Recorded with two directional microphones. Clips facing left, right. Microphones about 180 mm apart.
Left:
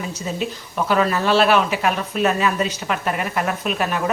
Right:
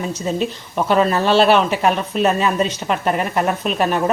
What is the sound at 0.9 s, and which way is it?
Speech, 30° right (ahead or behind).